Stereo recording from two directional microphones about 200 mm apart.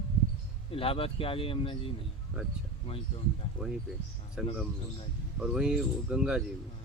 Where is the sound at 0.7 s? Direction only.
30° left (ahead or behind).